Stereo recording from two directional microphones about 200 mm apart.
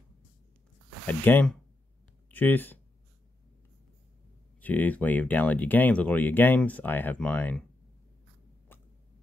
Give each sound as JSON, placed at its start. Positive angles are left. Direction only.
{"t": 1.0, "sound": "speech", "side_deg": 10}
{"t": 4.6, "sound": "speech", "side_deg": 10}